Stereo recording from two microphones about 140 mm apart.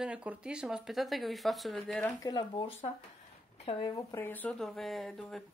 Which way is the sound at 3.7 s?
45° left (ahead or behind).